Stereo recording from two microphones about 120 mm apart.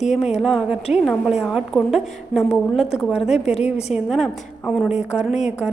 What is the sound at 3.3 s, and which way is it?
Speech, 65° left (ahead or behind).